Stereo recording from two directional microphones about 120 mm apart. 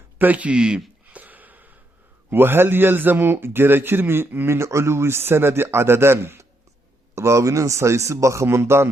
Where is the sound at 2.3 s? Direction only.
20° right (ahead or behind).